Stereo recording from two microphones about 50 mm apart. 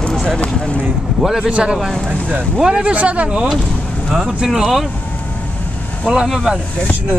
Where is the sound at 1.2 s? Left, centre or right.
Centre.